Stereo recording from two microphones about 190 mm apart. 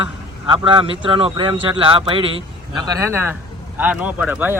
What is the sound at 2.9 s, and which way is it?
Speech, 15° right (ahead or behind).